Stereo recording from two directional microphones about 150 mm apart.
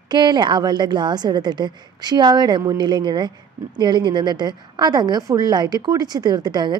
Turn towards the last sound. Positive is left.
turn(degrees=-30)  # may be behind; listen again after turning